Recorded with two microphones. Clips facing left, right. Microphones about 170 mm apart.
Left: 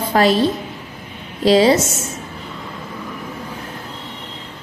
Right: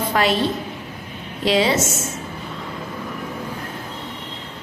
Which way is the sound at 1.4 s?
35° left (ahead or behind).